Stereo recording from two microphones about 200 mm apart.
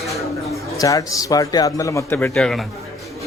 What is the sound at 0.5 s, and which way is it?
A man's voice, 15° left (ahead or behind).